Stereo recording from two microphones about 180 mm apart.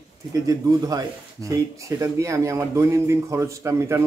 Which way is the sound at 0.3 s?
20° right (ahead or behind).